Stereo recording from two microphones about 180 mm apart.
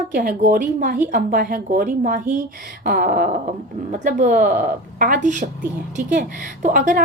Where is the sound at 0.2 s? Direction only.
50° right (ahead or behind).